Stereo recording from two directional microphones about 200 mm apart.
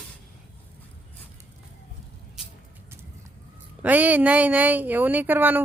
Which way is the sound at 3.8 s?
10° right (ahead or behind).